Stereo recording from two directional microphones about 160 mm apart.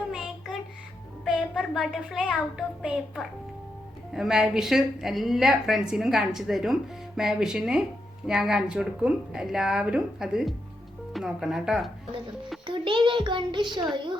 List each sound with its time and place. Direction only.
0.1 s music: centre (ahead or behind)
1.2 s a child's voice: centre (ahead or behind)
12.6 s a child's voice: 30° right (ahead or behind)